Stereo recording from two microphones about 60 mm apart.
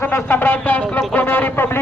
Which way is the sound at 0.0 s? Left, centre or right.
Left.